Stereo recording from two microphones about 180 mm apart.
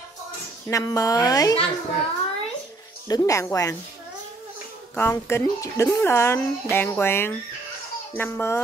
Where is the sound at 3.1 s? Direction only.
20° left (ahead or behind).